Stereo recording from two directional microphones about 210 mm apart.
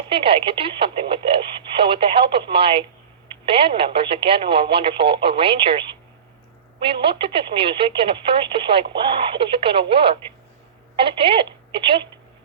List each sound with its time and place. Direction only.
0.1 s speech: 25° right (ahead or behind)